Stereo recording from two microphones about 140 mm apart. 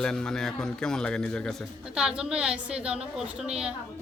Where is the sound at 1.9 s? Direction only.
5° right (ahead or behind).